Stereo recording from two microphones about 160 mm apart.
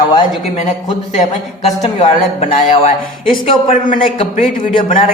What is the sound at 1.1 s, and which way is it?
Speech, 45° left (ahead or behind).